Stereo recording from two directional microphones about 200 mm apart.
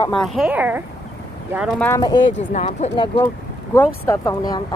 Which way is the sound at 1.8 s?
15° left (ahead or behind).